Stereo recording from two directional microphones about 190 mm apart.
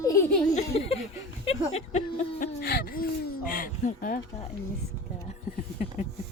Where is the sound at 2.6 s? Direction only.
55° left (ahead or behind).